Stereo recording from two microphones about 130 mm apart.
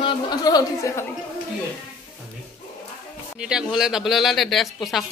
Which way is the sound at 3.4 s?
5° right (ahead or behind).